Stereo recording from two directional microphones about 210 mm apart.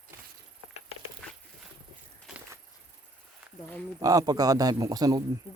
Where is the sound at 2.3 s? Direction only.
5° right (ahead or behind).